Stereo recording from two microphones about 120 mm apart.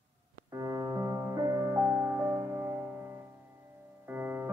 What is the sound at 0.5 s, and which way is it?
Music, 25° right (ahead or behind).